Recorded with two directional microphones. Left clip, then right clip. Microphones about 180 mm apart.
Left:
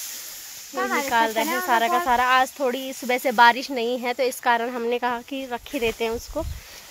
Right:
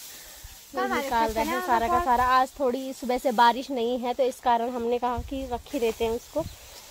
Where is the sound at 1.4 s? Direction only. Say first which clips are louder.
Left 3 dB; 45° left (ahead or behind).